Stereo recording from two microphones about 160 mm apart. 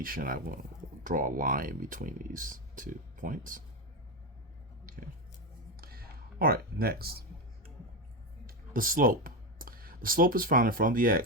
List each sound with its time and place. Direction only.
0.0 s speech: 60° right (ahead or behind)
5.7 s a sound: 70° right (ahead or behind)
8.4 s speech: 60° right (ahead or behind)